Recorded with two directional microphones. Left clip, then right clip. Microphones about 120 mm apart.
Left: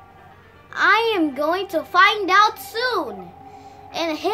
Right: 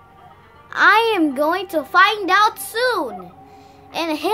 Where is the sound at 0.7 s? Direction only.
65° right (ahead or behind).